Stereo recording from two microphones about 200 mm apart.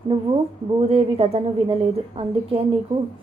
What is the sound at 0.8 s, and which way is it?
A woman's voice, 30° right (ahead or behind).